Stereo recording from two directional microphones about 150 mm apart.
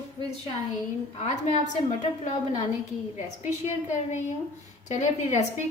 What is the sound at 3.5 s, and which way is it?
A woman's voice, 50° left (ahead or behind).